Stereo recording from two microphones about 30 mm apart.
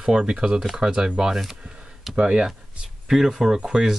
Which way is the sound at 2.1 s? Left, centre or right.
Right.